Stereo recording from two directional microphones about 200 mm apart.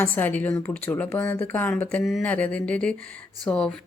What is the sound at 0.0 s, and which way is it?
A woman's voice, 10° left (ahead or behind).